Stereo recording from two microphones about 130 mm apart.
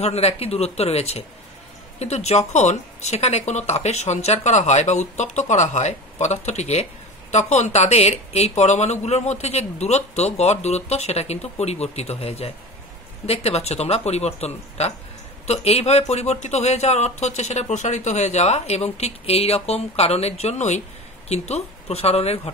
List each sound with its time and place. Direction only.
0.0 s speech: 55° left (ahead or behind)